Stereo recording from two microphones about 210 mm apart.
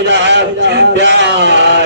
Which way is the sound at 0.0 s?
55° right (ahead or behind).